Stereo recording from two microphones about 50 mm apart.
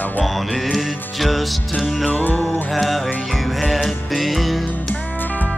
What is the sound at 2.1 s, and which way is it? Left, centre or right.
Music, left.